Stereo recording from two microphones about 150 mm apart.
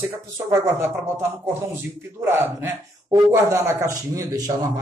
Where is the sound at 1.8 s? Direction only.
15° right (ahead or behind).